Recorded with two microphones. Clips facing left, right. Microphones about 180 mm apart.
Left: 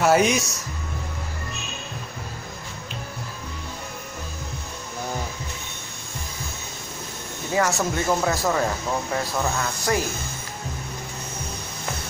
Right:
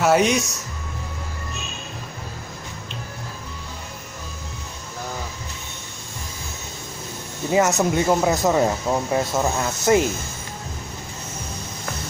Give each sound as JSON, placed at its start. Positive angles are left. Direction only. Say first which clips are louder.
{"t": 0.0, "sound": "speech", "louder": "right 1 dB", "side_deg": 0}
{"t": 7.5, "sound": "speech", "louder": "right 4 dB", "side_deg": -20}